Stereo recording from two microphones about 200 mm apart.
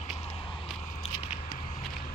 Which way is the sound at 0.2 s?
25° left (ahead or behind).